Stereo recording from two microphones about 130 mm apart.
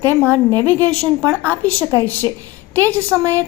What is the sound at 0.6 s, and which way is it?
Speech, 10° left (ahead or behind).